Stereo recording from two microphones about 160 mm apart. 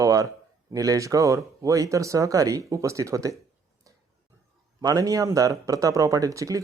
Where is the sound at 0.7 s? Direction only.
20° right (ahead or behind).